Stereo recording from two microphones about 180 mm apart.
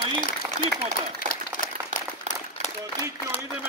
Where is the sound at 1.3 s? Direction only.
50° left (ahead or behind).